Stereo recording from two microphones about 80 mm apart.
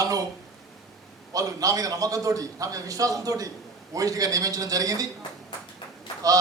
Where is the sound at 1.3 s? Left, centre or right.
Right.